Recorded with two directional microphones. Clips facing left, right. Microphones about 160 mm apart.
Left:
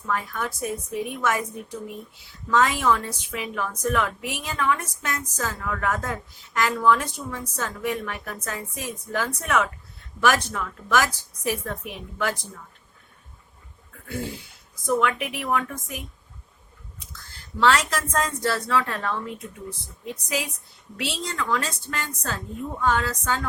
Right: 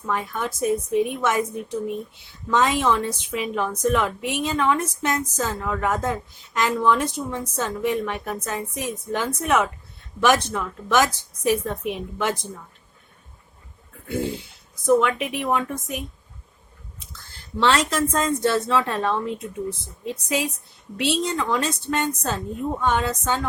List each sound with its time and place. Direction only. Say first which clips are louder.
0.1 s a woman's voice: right 2 dB; 20° right (ahead or behind)
2.5 s a woman's voice: right 1 dB; 20° right (ahead or behind)
14.1 s a woman's voice: right 6 dB; 20° right (ahead or behind)
17.6 s a woman's voice: right 1 dB; 25° right (ahead or behind)